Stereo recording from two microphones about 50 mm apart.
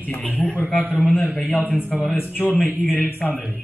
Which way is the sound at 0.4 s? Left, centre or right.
Left.